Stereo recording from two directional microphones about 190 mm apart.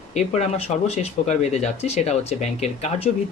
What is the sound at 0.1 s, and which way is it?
Speech, 35° left (ahead or behind).